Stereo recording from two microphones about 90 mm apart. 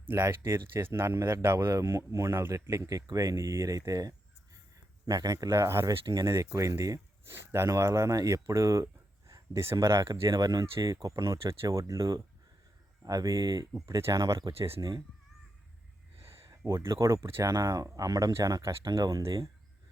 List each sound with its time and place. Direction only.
0.1 s speech: 25° right (ahead or behind); by 10.9 s 45° right (ahead or behind)
11.0 s speech: 35° right (ahead or behind)
13.8 s speech: 30° right (ahead or behind)
16.4 s speech: 35° right (ahead or behind)
17.5 s speech: 40° right (ahead or behind)